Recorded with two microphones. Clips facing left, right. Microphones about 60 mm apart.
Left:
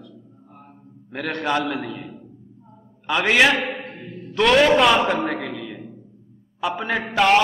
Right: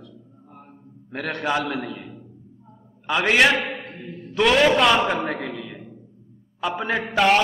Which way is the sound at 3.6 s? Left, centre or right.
Left.